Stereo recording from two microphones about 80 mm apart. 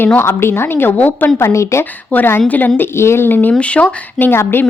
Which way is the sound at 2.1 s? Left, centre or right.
Left.